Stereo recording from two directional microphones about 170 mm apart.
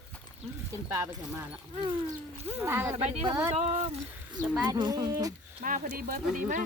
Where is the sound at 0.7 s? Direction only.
10° right (ahead or behind).